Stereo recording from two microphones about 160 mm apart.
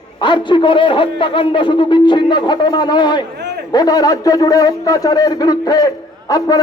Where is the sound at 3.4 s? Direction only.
90° right.